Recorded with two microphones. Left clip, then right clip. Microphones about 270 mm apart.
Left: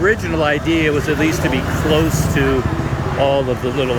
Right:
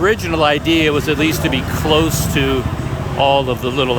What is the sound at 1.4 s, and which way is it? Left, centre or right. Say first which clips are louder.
Speech: even; centre.